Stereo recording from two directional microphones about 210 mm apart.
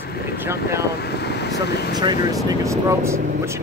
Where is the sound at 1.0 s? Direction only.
50° left (ahead or behind).